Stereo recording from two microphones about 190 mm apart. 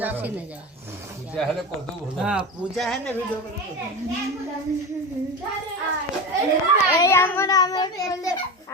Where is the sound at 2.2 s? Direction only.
Centre (ahead or behind).